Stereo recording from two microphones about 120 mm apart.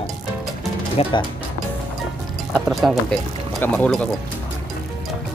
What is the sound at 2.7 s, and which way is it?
Speech, centre (ahead or behind).